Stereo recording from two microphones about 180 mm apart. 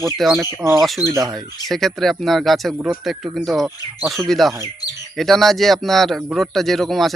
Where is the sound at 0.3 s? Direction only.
15° right (ahead or behind).